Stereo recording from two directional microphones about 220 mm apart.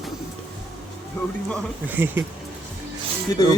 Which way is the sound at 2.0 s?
10° right (ahead or behind).